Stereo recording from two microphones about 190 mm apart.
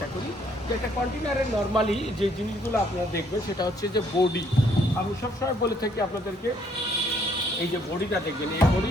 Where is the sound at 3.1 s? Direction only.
20° left (ahead or behind).